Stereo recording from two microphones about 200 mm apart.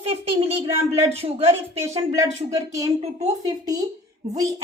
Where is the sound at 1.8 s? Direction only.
15° right (ahead or behind).